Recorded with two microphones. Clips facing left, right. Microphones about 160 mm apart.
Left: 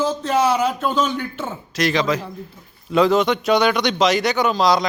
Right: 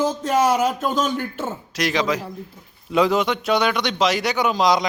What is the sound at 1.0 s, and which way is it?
A man's voice, 5° right (ahead or behind).